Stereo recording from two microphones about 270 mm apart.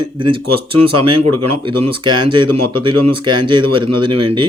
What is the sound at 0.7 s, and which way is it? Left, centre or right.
Speech, right.